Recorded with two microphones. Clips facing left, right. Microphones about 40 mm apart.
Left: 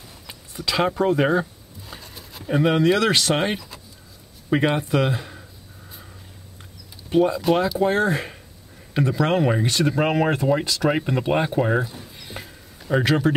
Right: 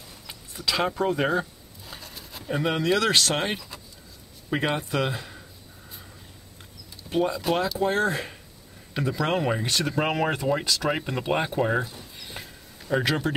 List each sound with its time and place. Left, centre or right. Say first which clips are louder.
0.3 s a sound: left 2 dB; centre
2.4 s speech: left 7 dB; centre
7.1 s speech: left 6 dB; centre